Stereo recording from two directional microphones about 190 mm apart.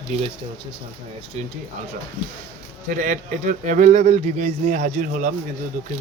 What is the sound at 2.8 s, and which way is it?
Speech, 45° right (ahead or behind).